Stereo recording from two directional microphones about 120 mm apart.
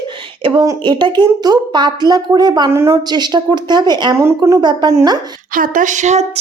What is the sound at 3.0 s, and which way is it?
Speech, 35° right (ahead or behind).